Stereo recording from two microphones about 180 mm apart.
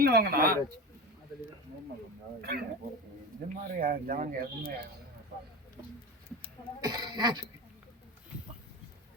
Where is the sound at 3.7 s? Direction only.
50° right (ahead or behind).